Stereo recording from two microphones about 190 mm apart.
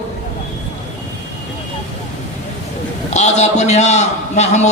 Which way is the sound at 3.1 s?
35° left (ahead or behind).